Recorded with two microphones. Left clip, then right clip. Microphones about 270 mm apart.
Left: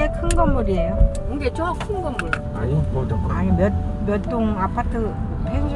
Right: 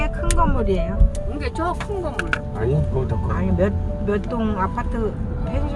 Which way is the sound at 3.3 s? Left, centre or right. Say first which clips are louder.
Left 1 dB; centre.